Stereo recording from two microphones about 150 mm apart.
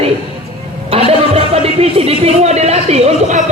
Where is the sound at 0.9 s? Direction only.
40° right (ahead or behind).